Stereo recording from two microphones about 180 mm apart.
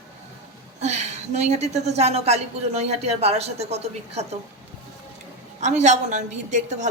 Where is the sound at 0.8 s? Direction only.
40° right (ahead or behind).